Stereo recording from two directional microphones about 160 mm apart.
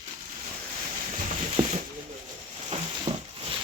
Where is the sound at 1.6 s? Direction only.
40° right (ahead or behind).